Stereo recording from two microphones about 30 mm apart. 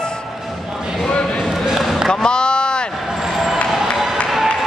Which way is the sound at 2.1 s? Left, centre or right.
Left.